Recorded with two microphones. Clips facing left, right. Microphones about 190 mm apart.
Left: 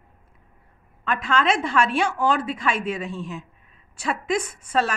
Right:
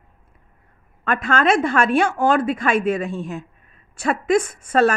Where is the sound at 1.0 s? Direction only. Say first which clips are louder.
Right 3 dB; 50° right (ahead or behind).